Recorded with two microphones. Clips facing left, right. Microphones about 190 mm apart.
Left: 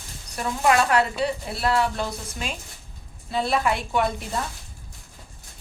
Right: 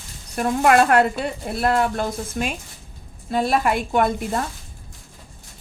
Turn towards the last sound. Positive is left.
turn(degrees=-50)  # may be behind; listen again after turning